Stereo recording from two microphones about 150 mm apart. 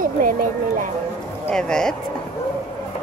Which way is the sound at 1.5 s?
5° left (ahead or behind).